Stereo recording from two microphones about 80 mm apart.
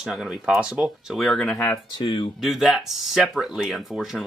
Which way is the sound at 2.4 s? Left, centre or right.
Centre.